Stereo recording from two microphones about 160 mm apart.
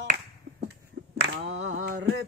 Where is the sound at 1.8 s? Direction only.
90° right.